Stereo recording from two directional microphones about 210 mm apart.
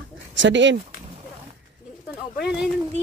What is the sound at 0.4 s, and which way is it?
Speech, 60° right (ahead or behind).